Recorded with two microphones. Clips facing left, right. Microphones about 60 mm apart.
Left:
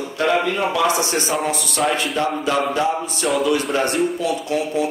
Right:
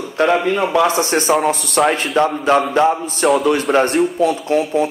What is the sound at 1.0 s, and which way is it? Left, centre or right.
Speech, right.